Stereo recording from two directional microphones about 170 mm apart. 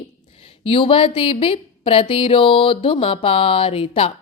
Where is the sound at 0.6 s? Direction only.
30° left (ahead or behind).